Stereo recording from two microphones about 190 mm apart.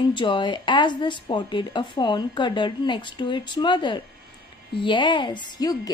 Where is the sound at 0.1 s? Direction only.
25° left (ahead or behind).